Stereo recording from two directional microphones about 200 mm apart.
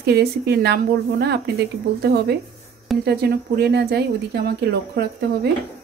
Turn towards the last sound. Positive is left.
turn(degrees=-55)  # may be behind; listen again after turning